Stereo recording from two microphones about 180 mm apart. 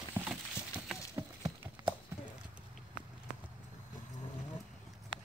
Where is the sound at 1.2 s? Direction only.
15° right (ahead or behind).